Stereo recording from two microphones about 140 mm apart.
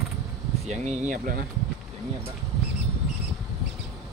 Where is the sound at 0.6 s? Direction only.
60° right (ahead or behind).